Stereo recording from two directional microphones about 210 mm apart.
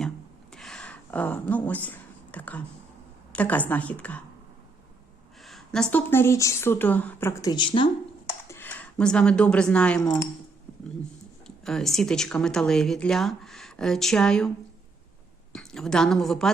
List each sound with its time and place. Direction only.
0.5 s a sound: 5° left (ahead or behind)
3.3 s a woman's voice: 5° left (ahead or behind)
5.4 s a woman's voice: centre (ahead or behind); by 7.9 s 25° left (ahead or behind)
8.3 s speech: 10° left (ahead or behind)
11.4 s speech: centre (ahead or behind)
15.5 s speech: centre (ahead or behind)